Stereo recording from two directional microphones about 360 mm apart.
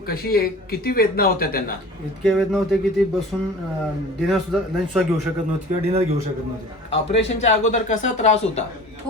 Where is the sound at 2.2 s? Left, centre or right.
Centre.